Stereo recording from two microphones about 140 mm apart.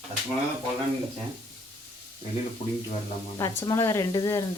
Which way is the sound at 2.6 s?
45° left (ahead or behind).